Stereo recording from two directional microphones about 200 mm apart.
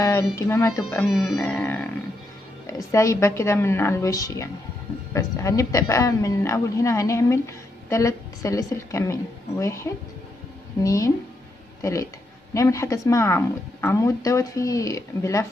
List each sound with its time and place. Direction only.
0.0 s a woman's voice: 15° left (ahead or behind)
1.2 s a woman's voice: 5° left (ahead or behind)